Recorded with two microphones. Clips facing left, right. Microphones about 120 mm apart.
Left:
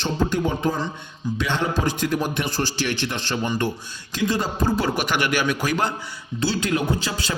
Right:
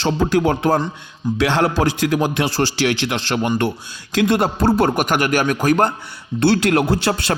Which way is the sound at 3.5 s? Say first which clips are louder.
Right 5 dB; 70° right (ahead or behind).